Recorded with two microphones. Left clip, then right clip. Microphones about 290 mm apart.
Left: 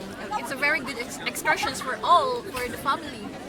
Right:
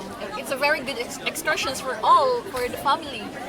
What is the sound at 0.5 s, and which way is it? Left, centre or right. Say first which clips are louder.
A woman's voice: right 3 dB; centre.